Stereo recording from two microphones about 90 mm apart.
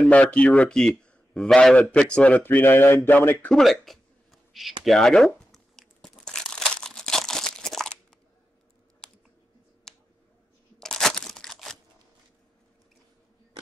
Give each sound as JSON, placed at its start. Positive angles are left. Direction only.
{"t": 0.1, "sound": "speech", "side_deg": 15}
{"t": 3.5, "sound": "a sound", "side_deg": 5}
{"t": 9.0, "sound": "typing", "side_deg": 5}
{"t": 9.9, "sound": "finger snapping", "side_deg": 5}
{"t": 10.8, "sound": "crunch", "side_deg": 5}